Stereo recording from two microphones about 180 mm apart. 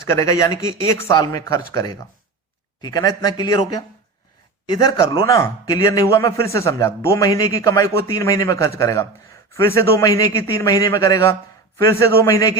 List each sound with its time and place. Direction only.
0.1 s a man's voice: 15° left (ahead or behind)